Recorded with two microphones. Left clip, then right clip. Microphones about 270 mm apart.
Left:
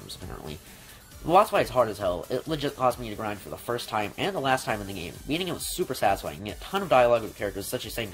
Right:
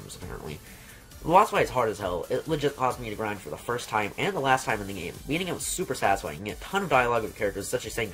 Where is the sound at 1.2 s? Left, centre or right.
Left.